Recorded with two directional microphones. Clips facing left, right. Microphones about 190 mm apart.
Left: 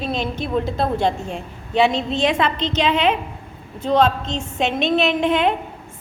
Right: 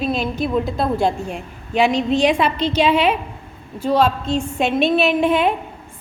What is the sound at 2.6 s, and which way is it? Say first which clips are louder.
Speech: right 3 dB; 20° left (ahead or behind).